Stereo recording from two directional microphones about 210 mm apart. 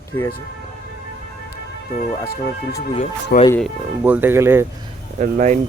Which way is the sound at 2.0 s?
45° left (ahead or behind).